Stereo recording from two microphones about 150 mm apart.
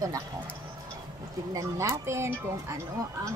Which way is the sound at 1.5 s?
20° right (ahead or behind).